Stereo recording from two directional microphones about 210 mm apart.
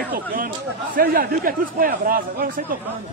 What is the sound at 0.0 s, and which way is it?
Chatter, 45° right (ahead or behind).